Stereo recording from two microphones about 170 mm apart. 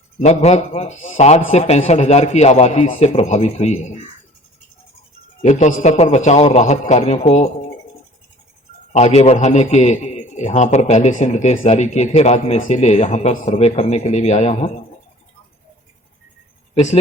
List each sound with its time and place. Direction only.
0.2 s a man's voice: 40° left (ahead or behind)
5.4 s a man's voice: 45° left (ahead or behind)
8.9 s a man's voice: 40° left (ahead or behind)
16.7 s speech: 40° left (ahead or behind)